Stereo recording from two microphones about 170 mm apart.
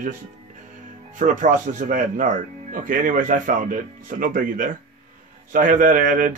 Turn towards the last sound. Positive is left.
turn(degrees=-50)  # may be behind; listen again after turning